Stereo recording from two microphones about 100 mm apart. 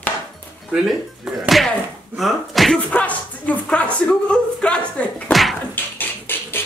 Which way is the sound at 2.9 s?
15° left (ahead or behind).